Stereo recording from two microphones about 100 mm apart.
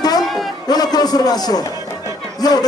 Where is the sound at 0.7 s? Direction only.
40° left (ahead or behind).